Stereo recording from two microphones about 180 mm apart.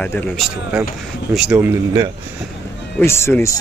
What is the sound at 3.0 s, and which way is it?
Speech, 15° left (ahead or behind).